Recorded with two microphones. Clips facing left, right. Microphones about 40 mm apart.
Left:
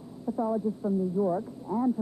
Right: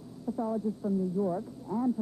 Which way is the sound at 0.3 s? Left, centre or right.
Centre.